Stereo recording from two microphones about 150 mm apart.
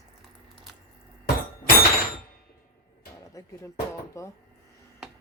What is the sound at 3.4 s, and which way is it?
Music, 20° left (ahead or behind).